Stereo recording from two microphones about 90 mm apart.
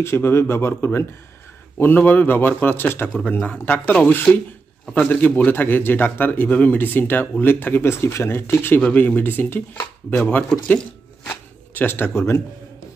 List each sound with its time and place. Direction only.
0.0 s speech: 30° left (ahead or behind)